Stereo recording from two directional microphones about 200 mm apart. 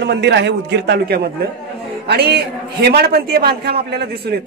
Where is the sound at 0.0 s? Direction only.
60° right (ahead or behind).